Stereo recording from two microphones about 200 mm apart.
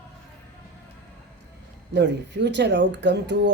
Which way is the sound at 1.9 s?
60° right (ahead or behind).